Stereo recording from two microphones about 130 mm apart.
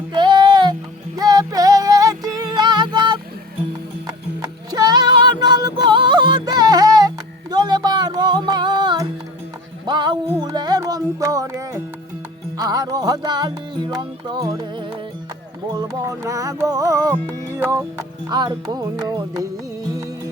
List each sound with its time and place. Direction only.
0.1 s music: 35° right (ahead or behind); by 18.0 s 20° right (ahead or behind)
18.3 s music: 35° right (ahead or behind)